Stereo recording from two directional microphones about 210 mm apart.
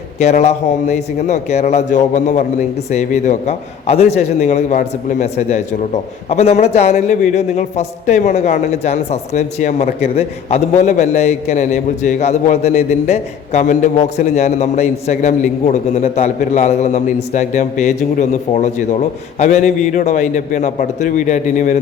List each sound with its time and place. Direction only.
0.2 s a man's voice: 30° left (ahead or behind)